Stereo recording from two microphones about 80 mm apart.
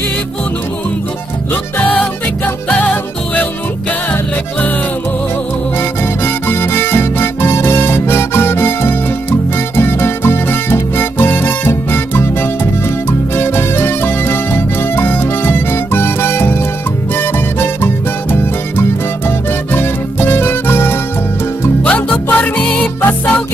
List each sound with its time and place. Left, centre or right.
1.5 s music: left
4.1 s music: left
5.8 s music: left